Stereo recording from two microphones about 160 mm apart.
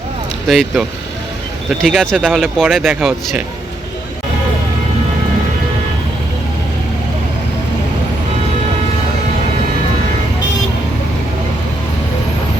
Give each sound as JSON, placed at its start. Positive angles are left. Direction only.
{"t": 0.4, "sound": "speech", "side_deg": 0}